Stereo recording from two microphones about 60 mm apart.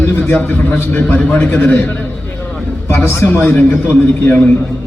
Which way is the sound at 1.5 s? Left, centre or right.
Left.